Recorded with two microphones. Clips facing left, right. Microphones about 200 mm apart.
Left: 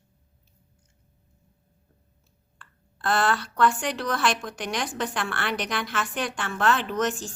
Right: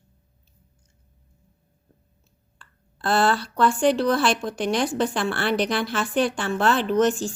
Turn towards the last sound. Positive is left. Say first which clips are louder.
# right 7 dB
turn(degrees=-30)  # may be behind; listen again after turning